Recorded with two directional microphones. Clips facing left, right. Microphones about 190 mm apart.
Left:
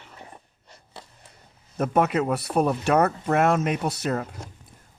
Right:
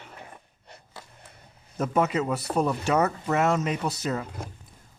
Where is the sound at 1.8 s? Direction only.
60° left (ahead or behind).